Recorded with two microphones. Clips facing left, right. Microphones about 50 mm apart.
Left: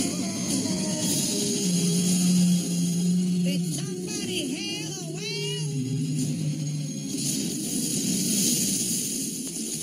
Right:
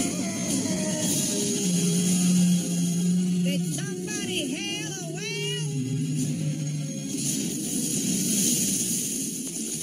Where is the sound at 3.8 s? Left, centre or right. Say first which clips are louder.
Even; right; by 8.0 s centre.